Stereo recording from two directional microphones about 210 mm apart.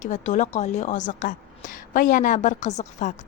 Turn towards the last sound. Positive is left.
turn(degrees=35)  # may be behind; listen again after turning